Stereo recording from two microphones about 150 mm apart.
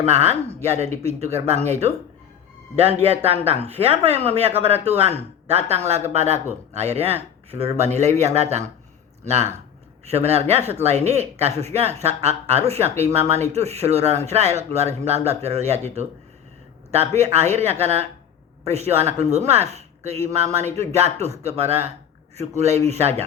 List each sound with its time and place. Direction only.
0.0 s speech: 45° right (ahead or behind)
3.2 s speech: 45° right (ahead or behind)
17.2 s speech: 45° right (ahead or behind)